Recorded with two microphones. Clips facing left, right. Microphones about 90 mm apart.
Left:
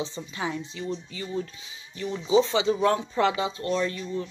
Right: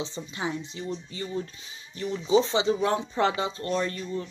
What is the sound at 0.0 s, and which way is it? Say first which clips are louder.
Speech: left 1 dB; 30° right (ahead or behind).